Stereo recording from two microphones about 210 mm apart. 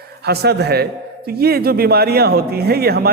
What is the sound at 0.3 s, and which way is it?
Speech, 50° right (ahead or behind).